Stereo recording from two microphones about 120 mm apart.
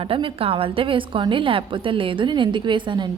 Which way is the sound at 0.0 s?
50° right (ahead or behind).